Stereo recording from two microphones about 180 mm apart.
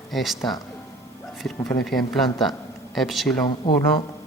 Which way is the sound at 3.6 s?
30° left (ahead or behind).